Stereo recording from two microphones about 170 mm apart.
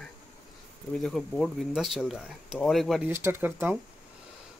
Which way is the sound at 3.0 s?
15° right (ahead or behind).